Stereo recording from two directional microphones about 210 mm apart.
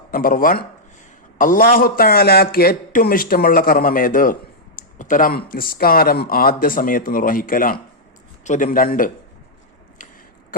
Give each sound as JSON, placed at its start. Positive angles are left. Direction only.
{"t": 0.1, "sound": "speech", "side_deg": 45}